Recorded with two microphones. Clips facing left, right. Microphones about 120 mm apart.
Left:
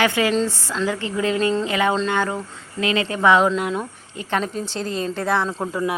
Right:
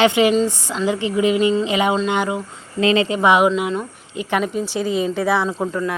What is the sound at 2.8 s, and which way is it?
Speech, 30° right (ahead or behind).